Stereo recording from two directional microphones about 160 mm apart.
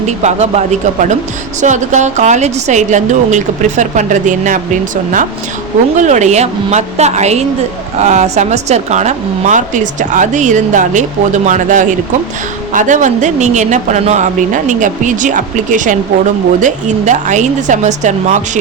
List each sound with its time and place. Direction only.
0.0 s a woman's voice: 45° right (ahead or behind)
6.0 s a woman's voice: 45° right (ahead or behind)